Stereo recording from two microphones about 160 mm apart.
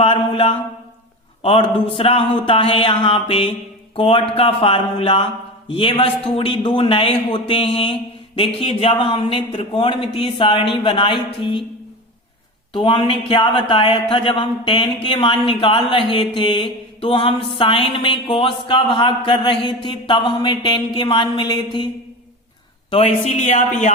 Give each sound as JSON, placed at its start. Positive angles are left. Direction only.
{"t": 0.0, "sound": "mantra", "side_deg": 40}
{"t": 1.4, "sound": "speech", "side_deg": 35}
{"t": 12.7, "sound": "speech", "side_deg": 30}
{"t": 22.9, "sound": "speech", "side_deg": 35}